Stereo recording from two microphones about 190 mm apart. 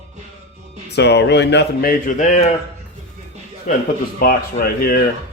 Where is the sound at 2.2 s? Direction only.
40° left (ahead or behind).